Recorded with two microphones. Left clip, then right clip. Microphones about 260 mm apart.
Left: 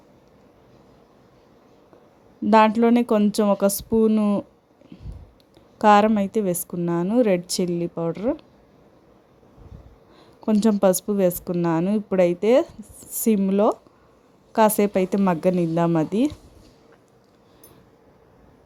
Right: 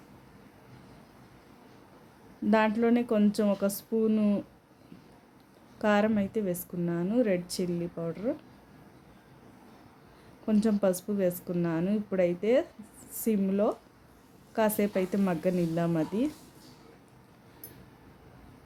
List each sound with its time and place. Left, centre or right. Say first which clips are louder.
2.5 s a woman's voice: left 9 dB; left
5.8 s a woman's voice: left 11 dB; left
10.4 s a woman's voice: left 8 dB; left